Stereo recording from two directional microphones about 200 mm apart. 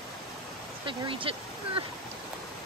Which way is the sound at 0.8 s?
25° right (ahead or behind).